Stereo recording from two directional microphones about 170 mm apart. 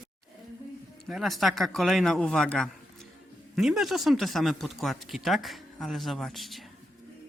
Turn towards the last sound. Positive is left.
turn(degrees=0)  # may be behind; listen again after turning